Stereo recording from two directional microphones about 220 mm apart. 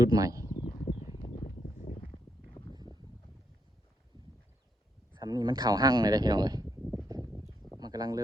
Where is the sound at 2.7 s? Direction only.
20° right (ahead or behind).